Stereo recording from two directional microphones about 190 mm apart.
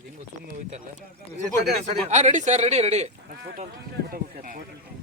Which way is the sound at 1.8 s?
40° right (ahead or behind).